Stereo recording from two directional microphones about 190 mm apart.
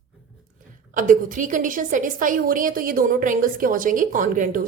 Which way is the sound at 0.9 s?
45° right (ahead or behind).